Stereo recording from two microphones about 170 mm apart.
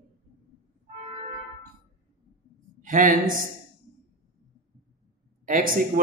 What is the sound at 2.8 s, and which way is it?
Speech, 50° right (ahead or behind).